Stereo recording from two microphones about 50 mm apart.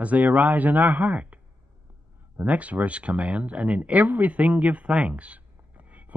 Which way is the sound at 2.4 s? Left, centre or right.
Right.